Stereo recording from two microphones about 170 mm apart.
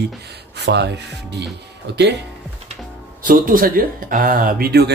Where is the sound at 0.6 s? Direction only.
80° right.